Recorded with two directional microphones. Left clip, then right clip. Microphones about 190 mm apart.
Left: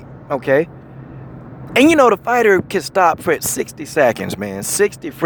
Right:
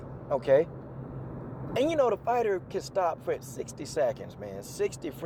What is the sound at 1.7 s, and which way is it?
Speech, 40° left (ahead or behind).